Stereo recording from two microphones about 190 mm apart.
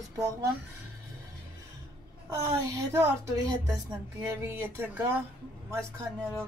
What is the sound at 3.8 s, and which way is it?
Speech, 15° right (ahead or behind).